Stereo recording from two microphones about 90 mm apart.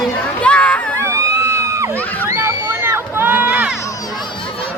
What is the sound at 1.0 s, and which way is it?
Crowd, 35° right (ahead or behind).